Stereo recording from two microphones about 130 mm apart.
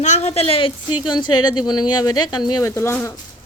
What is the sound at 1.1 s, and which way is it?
Speech, 35° left (ahead or behind).